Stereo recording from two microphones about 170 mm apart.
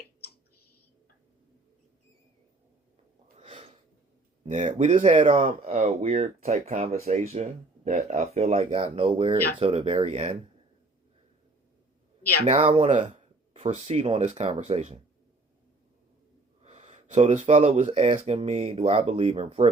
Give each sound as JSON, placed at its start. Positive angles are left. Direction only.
{"t": 3.3, "sound": "a sound", "side_deg": -35}
{"t": 4.4, "sound": "speech", "side_deg": -45}
{"t": 12.5, "sound": "speech", "side_deg": -35}
{"t": 16.6, "sound": "speech", "side_deg": -40}